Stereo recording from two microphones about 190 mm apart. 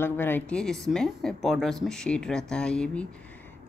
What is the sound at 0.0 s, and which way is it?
A woman's voice, 10° left (ahead or behind).